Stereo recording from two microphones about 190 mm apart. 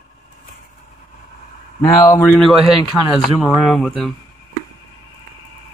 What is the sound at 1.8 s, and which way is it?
Speech, 20° left (ahead or behind).